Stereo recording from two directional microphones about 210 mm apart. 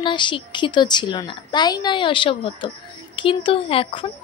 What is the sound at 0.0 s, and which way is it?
Speech, 20° left (ahead or behind).